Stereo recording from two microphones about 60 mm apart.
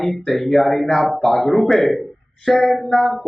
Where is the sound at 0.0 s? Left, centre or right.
Centre.